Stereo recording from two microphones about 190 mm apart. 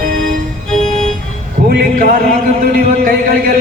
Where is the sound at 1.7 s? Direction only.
50° right (ahead or behind).